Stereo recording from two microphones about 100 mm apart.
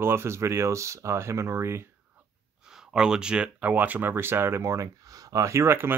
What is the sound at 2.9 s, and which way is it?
Speech, 5° right (ahead or behind).